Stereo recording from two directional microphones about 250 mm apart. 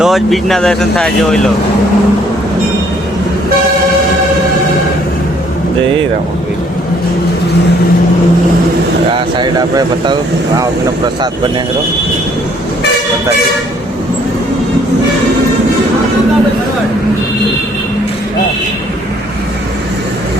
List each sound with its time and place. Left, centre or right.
0.0 s speech: centre
9.1 s speech: centre